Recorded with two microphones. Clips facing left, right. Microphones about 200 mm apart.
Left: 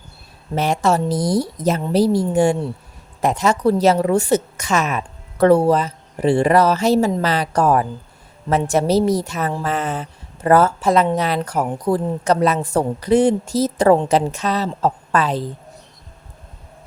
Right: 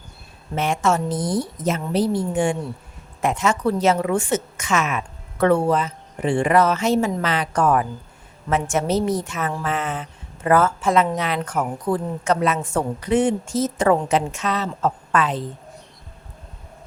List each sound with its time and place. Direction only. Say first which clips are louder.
0.5 s speech: left 3 dB; 35° left (ahead or behind)